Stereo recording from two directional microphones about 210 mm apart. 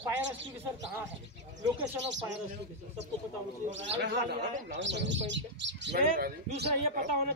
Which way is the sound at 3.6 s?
60° right (ahead or behind).